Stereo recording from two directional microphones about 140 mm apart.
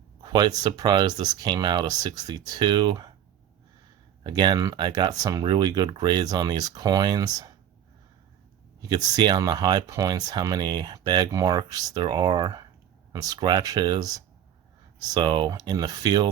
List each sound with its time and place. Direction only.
0.2 s speech: 30° right (ahead or behind)
4.2 s speech: 30° right (ahead or behind)
8.8 s speech: 30° right (ahead or behind)